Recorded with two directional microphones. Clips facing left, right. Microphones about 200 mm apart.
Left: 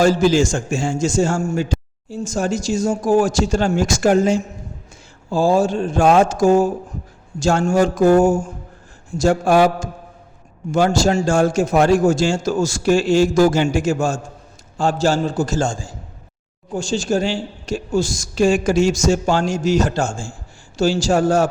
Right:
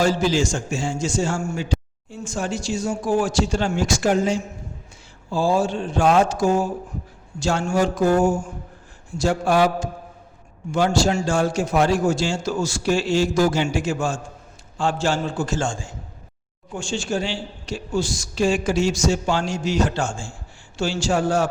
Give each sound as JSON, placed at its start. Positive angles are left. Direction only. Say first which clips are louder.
{"t": 0.0, "sound": "a man's voice", "louder": "left 5 dB", "side_deg": 45}